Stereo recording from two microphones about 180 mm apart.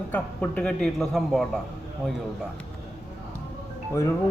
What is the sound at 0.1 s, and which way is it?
A man's voice, 5° left (ahead or behind).